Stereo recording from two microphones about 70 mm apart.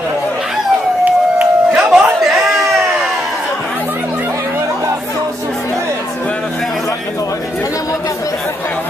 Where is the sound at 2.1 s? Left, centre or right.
Centre.